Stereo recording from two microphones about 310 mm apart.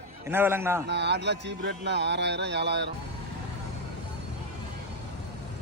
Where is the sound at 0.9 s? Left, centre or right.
Right.